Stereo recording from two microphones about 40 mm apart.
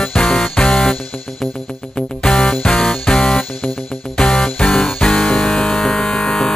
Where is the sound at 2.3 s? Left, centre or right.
Centre.